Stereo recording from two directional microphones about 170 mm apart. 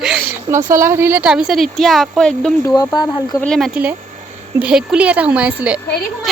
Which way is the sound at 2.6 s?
20° left (ahead or behind).